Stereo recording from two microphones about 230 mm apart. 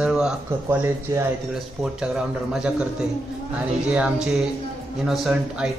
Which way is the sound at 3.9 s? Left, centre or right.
Centre.